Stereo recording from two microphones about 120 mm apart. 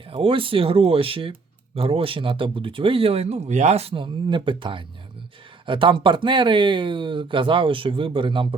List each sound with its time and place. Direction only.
0.1 s speech: 45° right (ahead or behind)